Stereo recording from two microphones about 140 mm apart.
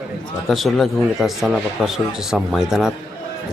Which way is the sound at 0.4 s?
Centre (ahead or behind).